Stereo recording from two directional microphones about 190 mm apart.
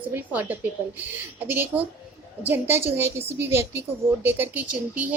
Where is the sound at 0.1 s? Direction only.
10° right (ahead or behind).